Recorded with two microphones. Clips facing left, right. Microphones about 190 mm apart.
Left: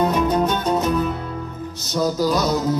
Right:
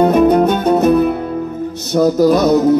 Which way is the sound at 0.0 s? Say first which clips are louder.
Right 9 dB; 60° right (ahead or behind).